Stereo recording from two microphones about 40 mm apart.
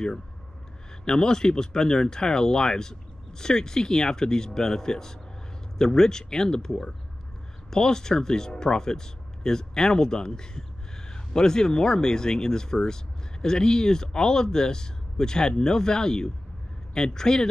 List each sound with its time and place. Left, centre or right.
1.0 s speech: centre